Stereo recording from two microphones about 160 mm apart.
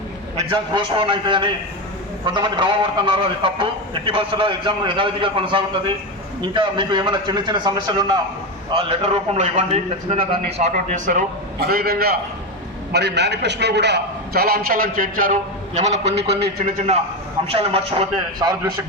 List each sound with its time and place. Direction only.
0.3 s a man's voice: 35° right (ahead or behind)
8.7 s a man's voice: 40° right (ahead or behind)
11.6 s a man's voice: 70° right (ahead or behind)
12.9 s a man's voice: 90° right; by 16.1 s 45° right (ahead or behind)
17.5 s a man's voice: 35° right (ahead or behind)